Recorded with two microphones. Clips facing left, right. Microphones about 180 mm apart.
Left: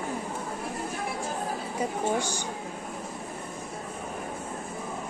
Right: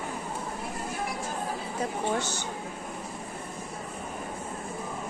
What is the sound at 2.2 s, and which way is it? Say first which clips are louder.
Speech: left 2 dB; 10° left (ahead or behind).